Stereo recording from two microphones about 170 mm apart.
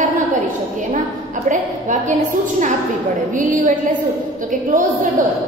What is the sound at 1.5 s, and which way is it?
A woman's voice, 45° right (ahead or behind).